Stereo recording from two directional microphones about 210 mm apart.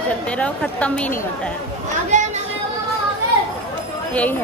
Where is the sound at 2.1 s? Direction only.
35° right (ahead or behind).